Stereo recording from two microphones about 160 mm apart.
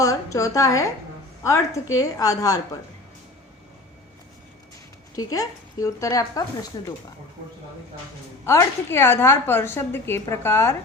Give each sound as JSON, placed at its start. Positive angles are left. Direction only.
{"t": 0.0, "sound": "speech", "side_deg": 20}
{"t": 5.3, "sound": "speech", "side_deg": 20}
{"t": 8.4, "sound": "a woman's voice", "side_deg": 15}